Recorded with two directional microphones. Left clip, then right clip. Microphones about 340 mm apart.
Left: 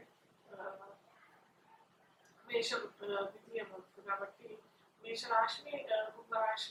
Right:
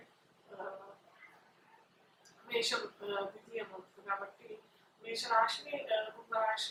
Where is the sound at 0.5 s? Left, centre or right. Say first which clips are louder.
Right 2 dB; centre.